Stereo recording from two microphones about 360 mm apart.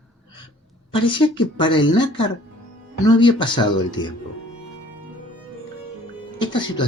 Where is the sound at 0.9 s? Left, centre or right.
Centre.